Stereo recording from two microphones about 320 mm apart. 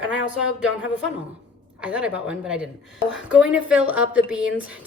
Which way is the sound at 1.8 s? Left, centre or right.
Centre.